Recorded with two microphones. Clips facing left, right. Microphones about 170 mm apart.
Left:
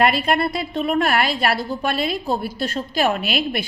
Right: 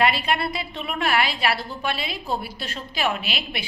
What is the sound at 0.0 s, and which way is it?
A woman's voice, 45° left (ahead or behind).